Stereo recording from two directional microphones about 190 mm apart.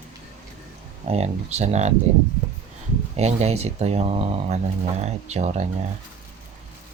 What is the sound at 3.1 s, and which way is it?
Speech, 35° right (ahead or behind).